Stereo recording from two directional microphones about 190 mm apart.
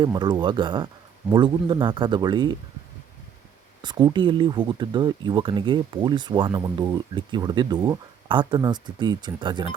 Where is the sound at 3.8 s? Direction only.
20° right (ahead or behind).